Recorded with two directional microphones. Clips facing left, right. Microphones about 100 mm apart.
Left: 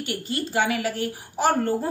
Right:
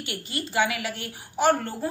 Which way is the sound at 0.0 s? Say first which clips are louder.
Left 4 dB; 35° left (ahead or behind).